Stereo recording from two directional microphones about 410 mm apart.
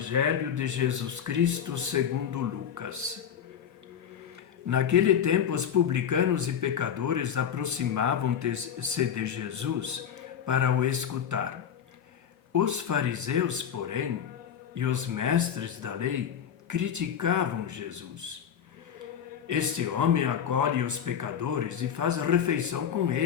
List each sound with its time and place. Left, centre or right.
0.1 s speech: right
4.7 s speech: right
12.5 s speech: right
19.5 s speech: right